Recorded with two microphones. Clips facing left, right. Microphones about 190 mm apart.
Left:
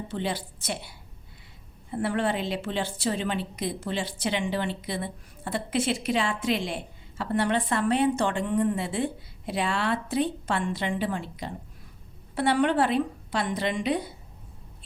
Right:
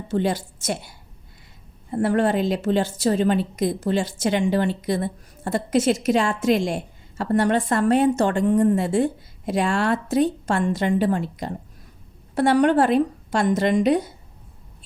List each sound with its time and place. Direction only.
0.1 s a woman's voice: 45° right (ahead or behind)